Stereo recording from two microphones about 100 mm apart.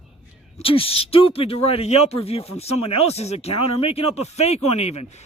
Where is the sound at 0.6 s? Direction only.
65° left (ahead or behind).